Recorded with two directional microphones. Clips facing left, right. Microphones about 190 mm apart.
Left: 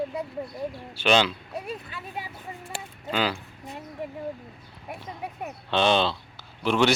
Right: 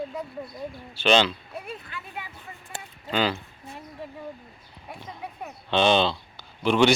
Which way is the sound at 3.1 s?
5° left (ahead or behind).